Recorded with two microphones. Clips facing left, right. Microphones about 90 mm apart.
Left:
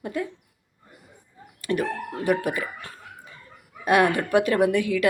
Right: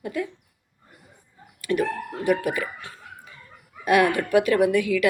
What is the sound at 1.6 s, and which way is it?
Speech, 35° left (ahead or behind).